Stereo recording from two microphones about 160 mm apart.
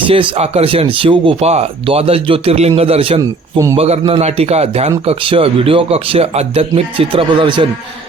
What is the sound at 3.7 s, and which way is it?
Speech, 35° right (ahead or behind).